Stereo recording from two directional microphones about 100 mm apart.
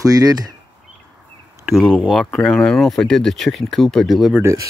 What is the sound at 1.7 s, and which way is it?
Speech, 5° left (ahead or behind).